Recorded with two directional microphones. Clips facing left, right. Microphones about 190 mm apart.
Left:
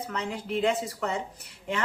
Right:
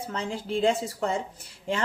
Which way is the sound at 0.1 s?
30° right (ahead or behind).